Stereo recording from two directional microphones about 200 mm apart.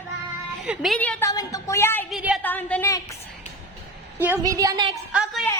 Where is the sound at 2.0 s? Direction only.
5° right (ahead or behind).